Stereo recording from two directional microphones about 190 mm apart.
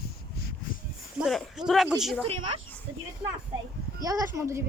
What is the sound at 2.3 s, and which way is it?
Speech, 30° right (ahead or behind).